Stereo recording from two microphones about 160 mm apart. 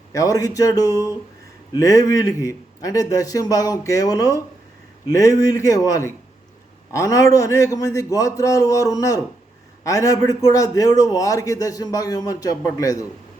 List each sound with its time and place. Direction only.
0.1 s a man's voice: 20° left (ahead or behind)